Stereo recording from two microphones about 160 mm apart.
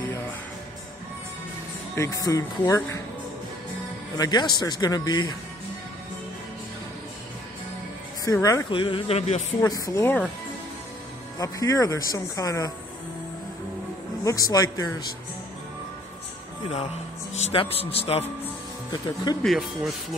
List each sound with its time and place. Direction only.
2.0 s speech: 20° left (ahead or behind)
4.2 s speech: 25° left (ahead or behind)
8.3 s speech: 20° left (ahead or behind)
8.6 s a man's voice: 35° left (ahead or behind)
9.6 s speech: 20° left (ahead or behind)
11.3 s speech: 20° left (ahead or behind)
14.2 s speech: 20° left (ahead or behind)
17.3 s a man's voice: 40° left (ahead or behind)
18.9 s speech: 25° left (ahead or behind)
19.4 s speech: centre (ahead or behind)